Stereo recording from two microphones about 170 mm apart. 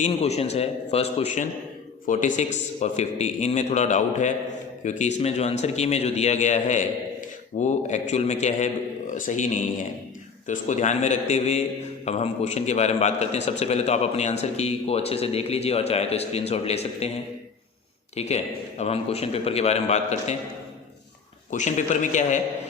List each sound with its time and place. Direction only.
0.0 s a man's voice: 40° left (ahead or behind)
18.2 s a man's voice: 40° left (ahead or behind)
21.5 s a man's voice: 45° left (ahead or behind)